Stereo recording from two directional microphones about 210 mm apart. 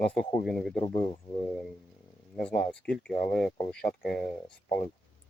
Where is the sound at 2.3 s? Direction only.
5° left (ahead or behind).